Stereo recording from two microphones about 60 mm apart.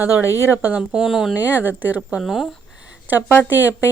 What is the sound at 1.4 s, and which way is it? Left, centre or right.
Speech, right.